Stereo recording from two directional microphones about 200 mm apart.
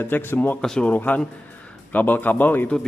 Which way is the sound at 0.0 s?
10° left (ahead or behind).